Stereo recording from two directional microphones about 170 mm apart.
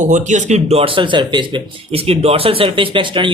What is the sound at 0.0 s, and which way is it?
Speech, 45° right (ahead or behind).